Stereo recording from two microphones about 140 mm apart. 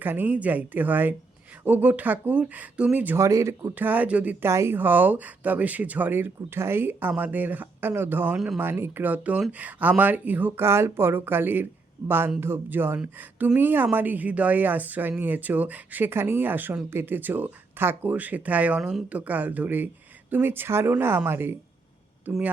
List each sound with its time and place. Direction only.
0.0 s a woman's voice: 15° right (ahead or behind)
8.6 s a woman's voice: 15° right (ahead or behind)